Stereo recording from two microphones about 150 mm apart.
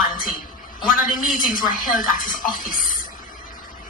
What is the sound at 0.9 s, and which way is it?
Speech, 65° left (ahead or behind).